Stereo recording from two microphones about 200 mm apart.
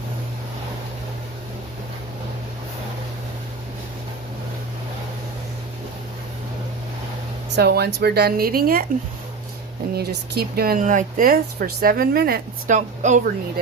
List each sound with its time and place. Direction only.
7.5 s speech: 55° right (ahead or behind)
9.9 s speech: 50° right (ahead or behind); by 13.2 s 35° right (ahead or behind)